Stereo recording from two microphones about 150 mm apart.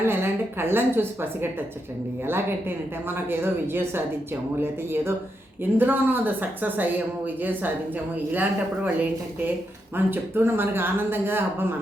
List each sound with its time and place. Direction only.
0.0 s a woman's voice: 15° right (ahead or behind)